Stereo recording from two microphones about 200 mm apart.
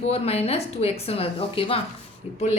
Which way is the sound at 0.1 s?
30° left (ahead or behind).